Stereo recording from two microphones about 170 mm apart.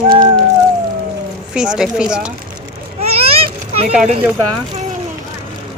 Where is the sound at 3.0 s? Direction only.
35° right (ahead or behind).